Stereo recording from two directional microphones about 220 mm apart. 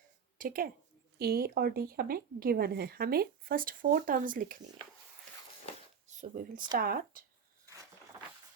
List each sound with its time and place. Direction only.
0.3 s a woman's voice: 40° right (ahead or behind)
6.1 s speech: 35° right (ahead or behind)